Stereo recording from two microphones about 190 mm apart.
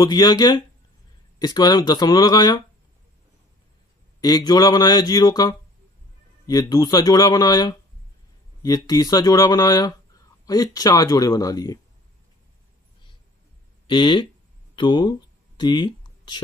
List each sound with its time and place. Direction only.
0.0 s speech: 20° left (ahead or behind)
4.2 s speech: 20° left (ahead or behind)
13.8 s speech: 25° left (ahead or behind)
14.8 s a sound: 25° left (ahead or behind)